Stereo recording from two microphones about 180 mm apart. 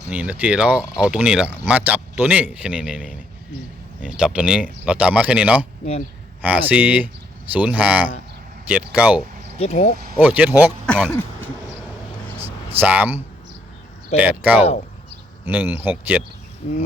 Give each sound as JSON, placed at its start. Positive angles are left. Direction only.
{"t": 0.1, "sound": "speech", "side_deg": -5}
{"t": 5.8, "sound": "speech", "side_deg": 40}
{"t": 6.4, "sound": "speech", "side_deg": -10}
{"t": 9.6, "sound": "speech", "side_deg": 35}
{"t": 10.2, "sound": "speech", "side_deg": -10}
{"t": 12.4, "sound": "a sound", "side_deg": -10}
{"t": 14.2, "sound": "speech", "side_deg": -10}